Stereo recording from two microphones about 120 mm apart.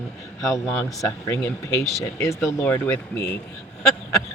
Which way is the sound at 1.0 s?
25° left (ahead or behind).